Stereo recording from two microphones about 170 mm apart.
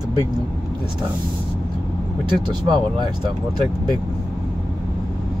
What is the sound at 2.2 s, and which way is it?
Speech, 25° right (ahead or behind).